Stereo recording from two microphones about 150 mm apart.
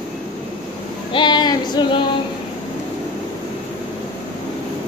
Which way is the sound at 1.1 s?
30° left (ahead or behind).